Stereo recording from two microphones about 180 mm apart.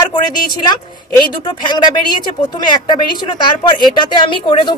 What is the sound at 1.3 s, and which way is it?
Speech, 25° left (ahead or behind).